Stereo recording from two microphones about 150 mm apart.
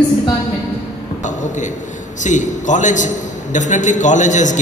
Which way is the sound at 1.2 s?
55° left (ahead or behind).